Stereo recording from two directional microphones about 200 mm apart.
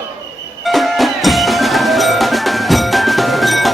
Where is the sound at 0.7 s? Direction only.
Centre (ahead or behind).